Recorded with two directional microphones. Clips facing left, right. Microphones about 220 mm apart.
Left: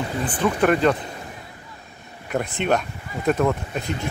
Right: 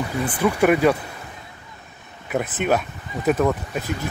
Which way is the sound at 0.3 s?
10° right (ahead or behind).